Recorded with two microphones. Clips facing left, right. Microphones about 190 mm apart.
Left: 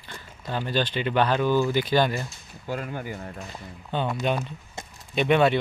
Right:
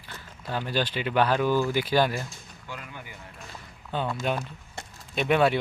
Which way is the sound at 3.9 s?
Centre (ahead or behind).